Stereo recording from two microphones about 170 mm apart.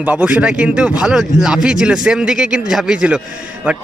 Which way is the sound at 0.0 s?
10° right (ahead or behind).